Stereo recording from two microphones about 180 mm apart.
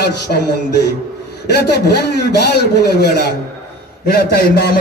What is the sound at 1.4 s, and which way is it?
A man's voice, 65° left (ahead or behind).